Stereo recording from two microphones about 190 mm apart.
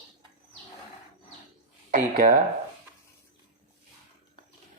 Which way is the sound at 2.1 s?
45° right (ahead or behind).